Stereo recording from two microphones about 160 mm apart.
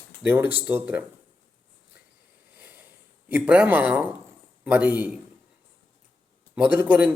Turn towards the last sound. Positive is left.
turn(degrees=-10)  # may be behind; listen again after turning